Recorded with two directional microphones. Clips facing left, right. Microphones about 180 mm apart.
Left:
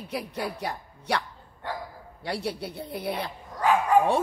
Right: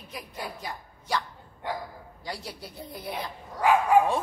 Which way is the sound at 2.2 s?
70° left (ahead or behind).